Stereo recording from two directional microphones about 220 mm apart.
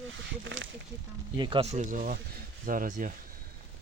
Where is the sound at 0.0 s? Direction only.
60° right (ahead or behind).